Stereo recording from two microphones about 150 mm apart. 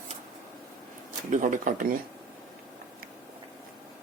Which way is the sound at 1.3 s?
60° right (ahead or behind).